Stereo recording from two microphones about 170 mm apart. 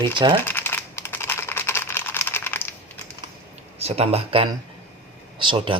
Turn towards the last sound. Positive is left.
turn(degrees=-30)  # may be behind; listen again after turning